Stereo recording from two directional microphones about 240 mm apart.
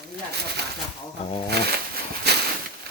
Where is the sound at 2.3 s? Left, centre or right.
Right.